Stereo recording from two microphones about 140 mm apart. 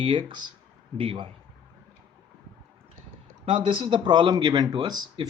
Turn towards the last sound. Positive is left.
turn(degrees=-30)  # may be behind; listen again after turning